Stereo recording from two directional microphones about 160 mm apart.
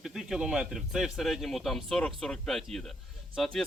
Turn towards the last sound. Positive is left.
turn(degrees=0)  # may be behind; listen again after turning